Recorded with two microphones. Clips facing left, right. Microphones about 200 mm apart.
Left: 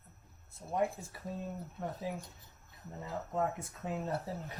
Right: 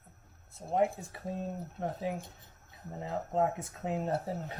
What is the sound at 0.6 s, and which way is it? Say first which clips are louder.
Speech: right 4 dB; 25° right (ahead or behind).